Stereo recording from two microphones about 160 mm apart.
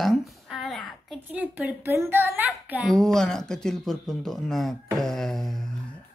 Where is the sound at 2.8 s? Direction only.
Centre (ahead or behind).